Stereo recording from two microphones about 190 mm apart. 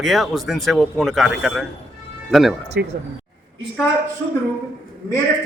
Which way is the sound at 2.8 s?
55° right (ahead or behind).